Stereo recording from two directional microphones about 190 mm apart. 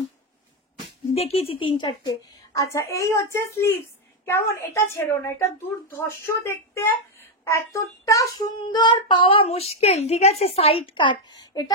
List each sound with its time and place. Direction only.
1.1 s a woman's voice: 30° left (ahead or behind)